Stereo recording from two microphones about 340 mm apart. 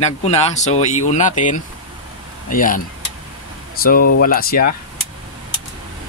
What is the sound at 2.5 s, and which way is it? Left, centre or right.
Speech, left.